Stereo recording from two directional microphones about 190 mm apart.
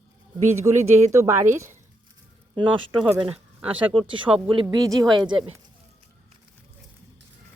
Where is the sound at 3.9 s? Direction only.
25° right (ahead or behind).